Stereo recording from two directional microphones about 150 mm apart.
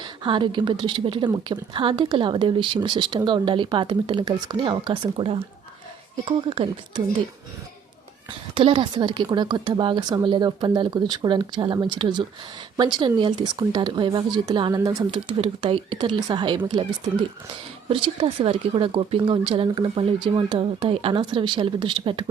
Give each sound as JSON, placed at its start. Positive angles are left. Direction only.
{"t": 0.0, "sound": "speech", "side_deg": -30}
{"t": 8.5, "sound": "speech", "side_deg": -35}
{"t": 17.8, "sound": "speech", "side_deg": -35}